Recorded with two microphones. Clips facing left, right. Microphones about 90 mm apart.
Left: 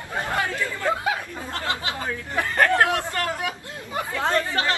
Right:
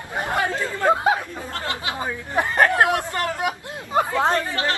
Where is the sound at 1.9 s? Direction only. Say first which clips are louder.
Right 2 dB; 20° right (ahead or behind).